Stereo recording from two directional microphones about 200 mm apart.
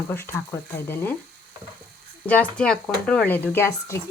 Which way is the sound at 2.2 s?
5° left (ahead or behind).